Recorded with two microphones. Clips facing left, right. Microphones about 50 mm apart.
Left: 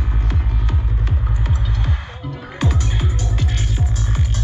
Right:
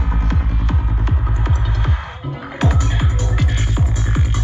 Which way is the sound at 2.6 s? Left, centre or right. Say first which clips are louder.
Right 2 dB; centre.